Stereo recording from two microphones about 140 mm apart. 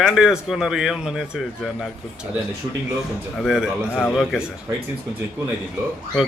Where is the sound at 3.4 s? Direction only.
Centre (ahead or behind).